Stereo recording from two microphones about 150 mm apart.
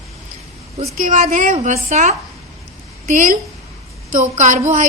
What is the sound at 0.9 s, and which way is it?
A woman's voice, 60° right (ahead or behind).